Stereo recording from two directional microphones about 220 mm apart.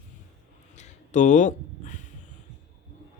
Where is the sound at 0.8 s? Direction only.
35° left (ahead or behind).